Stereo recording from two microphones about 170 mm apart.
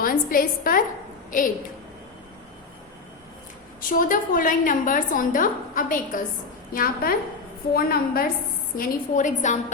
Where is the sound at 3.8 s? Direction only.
55° left (ahead or behind).